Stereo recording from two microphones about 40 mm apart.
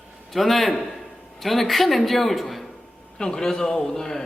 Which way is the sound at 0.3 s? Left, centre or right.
Centre.